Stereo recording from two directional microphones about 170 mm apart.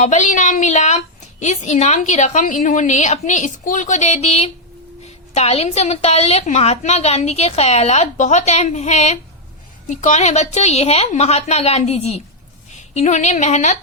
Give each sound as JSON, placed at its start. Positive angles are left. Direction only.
{"t": 0.0, "sound": "a woman's voice", "side_deg": 45}